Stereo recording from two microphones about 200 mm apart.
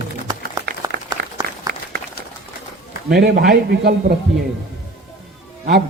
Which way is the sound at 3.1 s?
50° right (ahead or behind).